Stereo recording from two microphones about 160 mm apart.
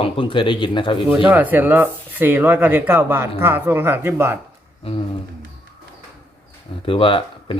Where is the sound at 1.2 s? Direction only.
10° right (ahead or behind).